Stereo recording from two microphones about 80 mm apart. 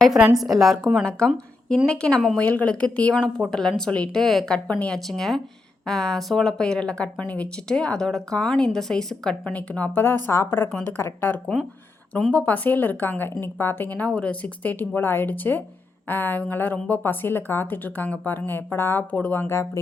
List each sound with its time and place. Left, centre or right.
0.3 s a woman's voice: centre
1.7 s speech: centre
4.2 s a woman's voice: centre
4.5 s speech: centre
4.9 s a woman's voice: centre; by 11.3 s left
12.3 s speech: centre; by 19.8 s left